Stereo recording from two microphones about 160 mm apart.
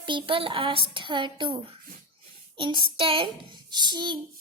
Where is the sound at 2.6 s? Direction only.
30° right (ahead or behind).